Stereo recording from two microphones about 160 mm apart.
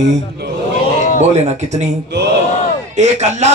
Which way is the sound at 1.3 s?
45° right (ahead or behind).